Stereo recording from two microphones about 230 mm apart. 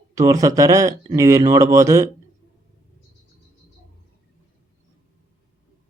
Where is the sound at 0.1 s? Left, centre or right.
Centre.